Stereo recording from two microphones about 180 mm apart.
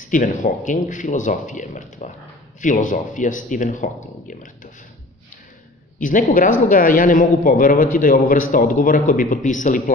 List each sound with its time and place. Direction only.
0.0 s a man's voice: 50° left (ahead or behind)
5.9 s a woman's voice: 50° left (ahead or behind)